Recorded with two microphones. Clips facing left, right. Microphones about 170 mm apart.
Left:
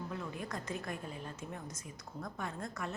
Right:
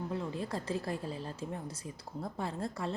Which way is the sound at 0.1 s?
30° right (ahead or behind).